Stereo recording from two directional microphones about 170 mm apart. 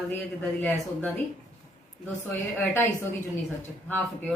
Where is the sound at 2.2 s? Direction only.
10° left (ahead or behind).